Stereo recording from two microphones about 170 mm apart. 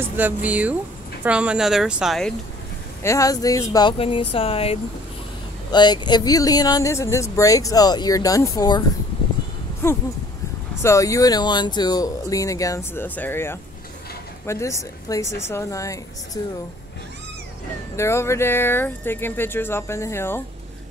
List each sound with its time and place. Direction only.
0.0 s speech: 10° right (ahead or behind)
3.0 s speech: 20° left (ahead or behind)
4.0 s speech: 35° left (ahead or behind)
10.8 s speech: 20° left (ahead or behind)
17.9 s speech: 15° left (ahead or behind)